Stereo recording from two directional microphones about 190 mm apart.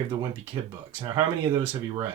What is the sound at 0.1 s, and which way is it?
Speech, 20° right (ahead or behind).